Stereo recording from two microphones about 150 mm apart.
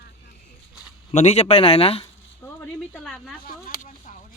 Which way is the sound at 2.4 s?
15° left (ahead or behind).